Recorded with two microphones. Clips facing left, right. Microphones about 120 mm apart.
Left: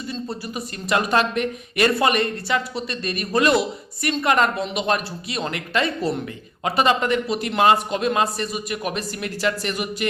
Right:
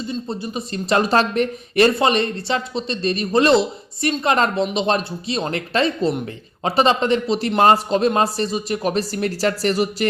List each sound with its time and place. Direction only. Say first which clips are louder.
0.1 s a man's voice: right 1 dB; 25° right (ahead or behind)